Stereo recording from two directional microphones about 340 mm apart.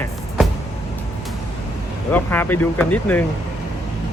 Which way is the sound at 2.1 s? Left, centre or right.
Centre.